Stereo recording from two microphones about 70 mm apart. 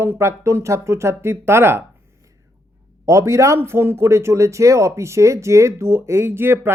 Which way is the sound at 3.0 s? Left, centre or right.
Right.